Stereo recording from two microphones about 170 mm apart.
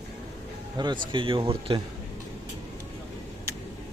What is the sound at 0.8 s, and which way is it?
Speech, 25° right (ahead or behind).